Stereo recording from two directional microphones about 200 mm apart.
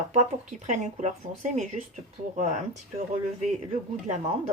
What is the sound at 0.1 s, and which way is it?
Speech, 35° right (ahead or behind).